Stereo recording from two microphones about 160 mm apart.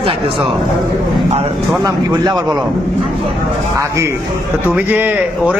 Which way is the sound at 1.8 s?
25° right (ahead or behind).